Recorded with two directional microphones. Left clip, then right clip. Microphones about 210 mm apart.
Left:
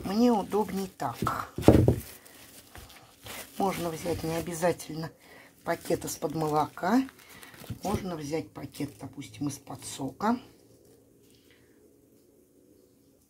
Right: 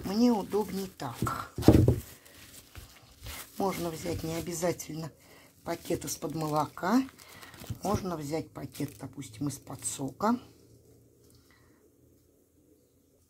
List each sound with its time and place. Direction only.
0.0 s speech: centre (ahead or behind)
3.5 s speech: centre (ahead or behind)